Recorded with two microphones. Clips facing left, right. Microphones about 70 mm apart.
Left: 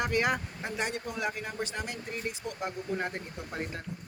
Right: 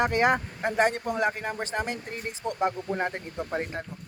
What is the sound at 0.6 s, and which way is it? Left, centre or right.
Speech, right.